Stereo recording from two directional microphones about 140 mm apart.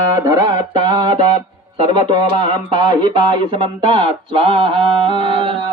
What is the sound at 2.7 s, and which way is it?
Speech, 35° right (ahead or behind).